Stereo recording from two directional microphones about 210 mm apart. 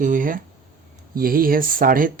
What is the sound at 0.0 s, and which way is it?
Speech, 40° right (ahead or behind).